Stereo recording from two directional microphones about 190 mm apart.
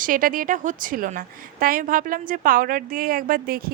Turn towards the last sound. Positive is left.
turn(degrees=-50)  # may be behind; listen again after turning